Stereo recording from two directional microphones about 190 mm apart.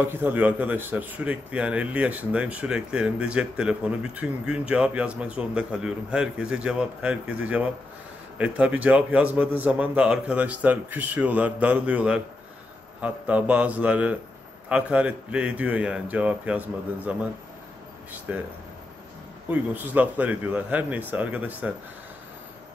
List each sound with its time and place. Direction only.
0.0 s speech: 10° right (ahead or behind)
19.5 s speech: 10° right (ahead or behind)